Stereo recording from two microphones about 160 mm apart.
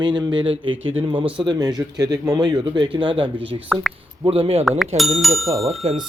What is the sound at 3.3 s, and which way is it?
Speech, 10° right (ahead or behind).